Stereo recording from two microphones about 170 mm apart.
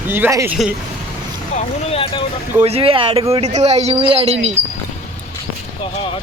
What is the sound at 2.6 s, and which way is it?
A man's voice, 35° right (ahead or behind).